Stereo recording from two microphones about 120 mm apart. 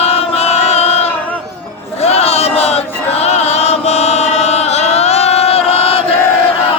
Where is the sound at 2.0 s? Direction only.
60° left (ahead or behind).